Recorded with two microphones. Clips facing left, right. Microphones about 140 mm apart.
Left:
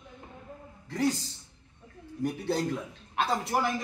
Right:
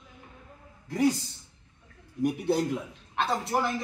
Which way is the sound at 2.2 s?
15° right (ahead or behind).